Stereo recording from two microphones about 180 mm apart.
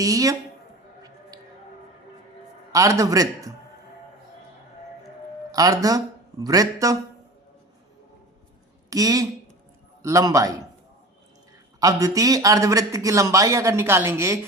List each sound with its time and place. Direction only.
0.0 s speech: 20° right (ahead or behind)
1.3 s a sound: 20° right (ahead or behind)
2.7 s a man's voice: 15° right (ahead or behind)
5.5 s speech: 20° right (ahead or behind)
8.9 s a man's voice: 20° right (ahead or behind)
11.8 s a man's voice: 20° right (ahead or behind)